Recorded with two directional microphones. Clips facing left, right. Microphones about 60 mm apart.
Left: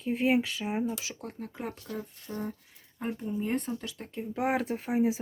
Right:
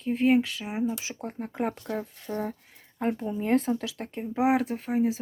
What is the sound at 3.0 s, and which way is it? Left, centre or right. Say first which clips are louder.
Speech: right 4 dB; right.